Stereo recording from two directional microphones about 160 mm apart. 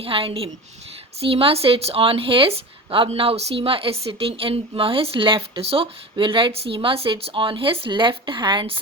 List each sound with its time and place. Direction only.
0.0 s speech: 35° right (ahead or behind)